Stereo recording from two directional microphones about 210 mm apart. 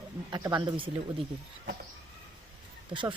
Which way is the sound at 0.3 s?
15° right (ahead or behind).